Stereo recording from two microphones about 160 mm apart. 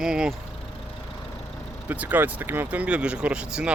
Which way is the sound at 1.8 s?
10° right (ahead or behind).